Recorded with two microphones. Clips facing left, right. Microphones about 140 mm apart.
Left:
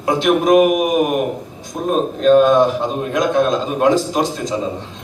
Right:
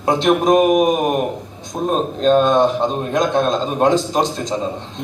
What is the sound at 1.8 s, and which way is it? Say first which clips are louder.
A man's voice: left 1 dB; 30° right (ahead or behind).